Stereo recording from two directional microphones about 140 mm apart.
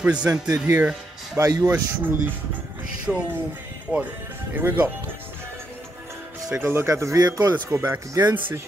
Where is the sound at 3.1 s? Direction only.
5° right (ahead or behind).